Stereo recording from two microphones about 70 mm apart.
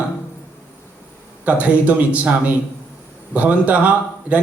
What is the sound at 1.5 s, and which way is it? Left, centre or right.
A man's voice, right.